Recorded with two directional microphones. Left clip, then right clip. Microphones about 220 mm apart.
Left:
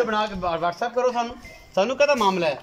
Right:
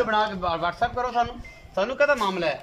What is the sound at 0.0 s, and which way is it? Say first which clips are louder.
A man's voice: even; 5° left (ahead or behind).